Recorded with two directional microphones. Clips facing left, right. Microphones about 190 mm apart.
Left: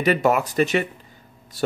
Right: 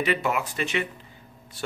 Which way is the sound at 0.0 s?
40° left (ahead or behind).